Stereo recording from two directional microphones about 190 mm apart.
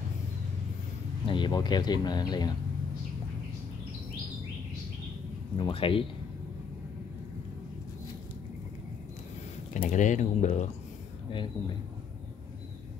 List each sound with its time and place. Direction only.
1.2 s speech: 25° left (ahead or behind)
5.6 s speech: 30° left (ahead or behind)
9.8 s speech: 40° left (ahead or behind)